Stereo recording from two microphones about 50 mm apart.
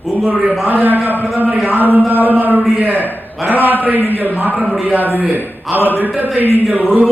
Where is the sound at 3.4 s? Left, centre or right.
Right.